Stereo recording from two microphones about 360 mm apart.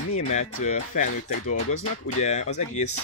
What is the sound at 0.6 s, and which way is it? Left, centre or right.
Speech, left.